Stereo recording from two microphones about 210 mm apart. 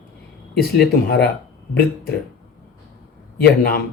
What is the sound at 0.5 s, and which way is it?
Speech, 50° left (ahead or behind).